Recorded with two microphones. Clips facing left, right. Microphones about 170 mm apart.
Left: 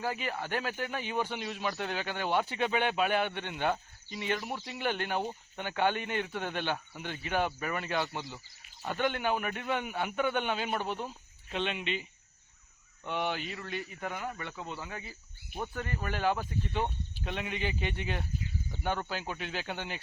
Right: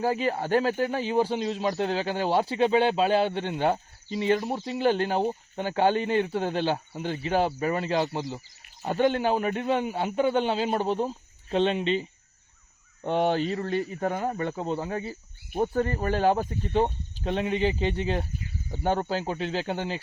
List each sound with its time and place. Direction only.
0.0 s speech: 40° right (ahead or behind)